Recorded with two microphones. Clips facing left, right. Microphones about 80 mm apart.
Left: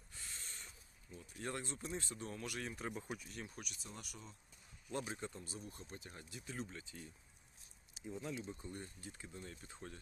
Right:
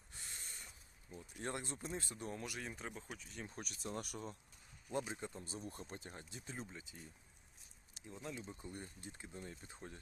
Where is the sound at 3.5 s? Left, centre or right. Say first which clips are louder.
Right 6 dB; right.